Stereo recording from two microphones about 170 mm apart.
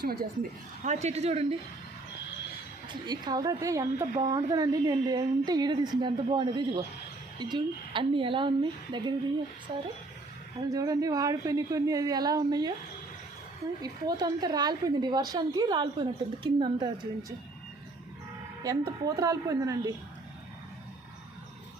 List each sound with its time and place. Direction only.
0.0 s a woman's voice: 65° right (ahead or behind)
0.9 s speech: 40° right (ahead or behind)
2.9 s a woman's voice: 25° right (ahead or behind)
10.6 s a woman's voice: 20° right (ahead or behind)
13.8 s a woman's voice: 20° right (ahead or behind)
18.6 s a woman's voice: 20° right (ahead or behind)